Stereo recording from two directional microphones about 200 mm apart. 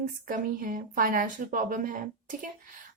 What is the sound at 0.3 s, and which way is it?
A woman's voice, 45° right (ahead or behind).